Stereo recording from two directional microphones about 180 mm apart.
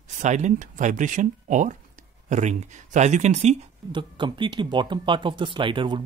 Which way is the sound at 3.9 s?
25° right (ahead or behind).